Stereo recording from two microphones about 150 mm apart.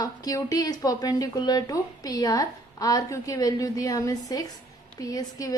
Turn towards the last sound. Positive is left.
turn(degrees=25)  # may be behind; listen again after turning